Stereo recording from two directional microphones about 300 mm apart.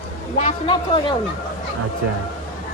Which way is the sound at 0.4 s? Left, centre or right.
Centre.